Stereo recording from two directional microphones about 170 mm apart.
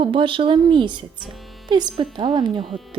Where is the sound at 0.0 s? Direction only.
30° right (ahead or behind).